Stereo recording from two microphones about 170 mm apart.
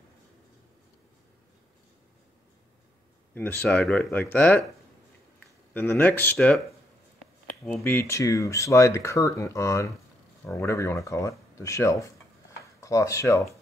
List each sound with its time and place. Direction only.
3.3 s speech: 10° left (ahead or behind)
5.7 s speech: 10° left (ahead or behind)
7.6 s speech: centre (ahead or behind)
7.9 s speech: 15° left (ahead or behind)